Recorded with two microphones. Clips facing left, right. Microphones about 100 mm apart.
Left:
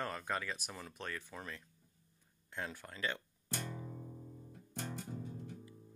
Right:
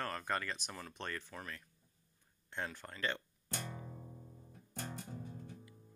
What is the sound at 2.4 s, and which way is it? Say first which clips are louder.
Speech: right 1 dB; 5° left (ahead or behind).